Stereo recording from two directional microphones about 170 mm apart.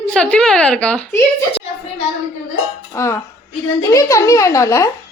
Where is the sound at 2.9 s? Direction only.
15° left (ahead or behind).